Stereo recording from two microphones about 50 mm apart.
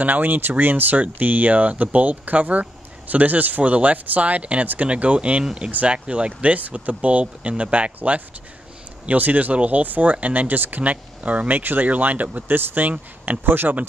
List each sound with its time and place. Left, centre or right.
0.0 s speech: right